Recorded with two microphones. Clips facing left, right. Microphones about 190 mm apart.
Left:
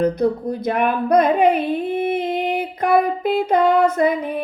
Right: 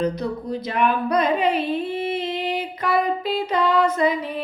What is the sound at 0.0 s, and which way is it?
Speech, 55° left (ahead or behind).